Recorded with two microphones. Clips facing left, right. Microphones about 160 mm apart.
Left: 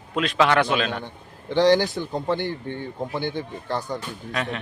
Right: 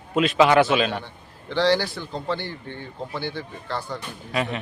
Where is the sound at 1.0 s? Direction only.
15° left (ahead or behind).